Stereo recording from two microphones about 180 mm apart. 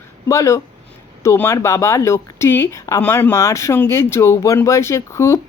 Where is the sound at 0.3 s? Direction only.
15° left (ahead or behind).